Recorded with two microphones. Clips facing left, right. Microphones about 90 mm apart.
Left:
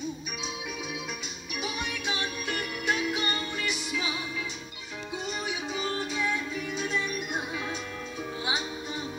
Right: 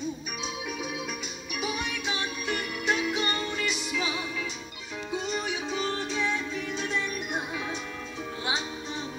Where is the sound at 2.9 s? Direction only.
30° right (ahead or behind).